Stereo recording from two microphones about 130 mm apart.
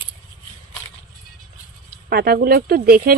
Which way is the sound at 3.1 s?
90° right.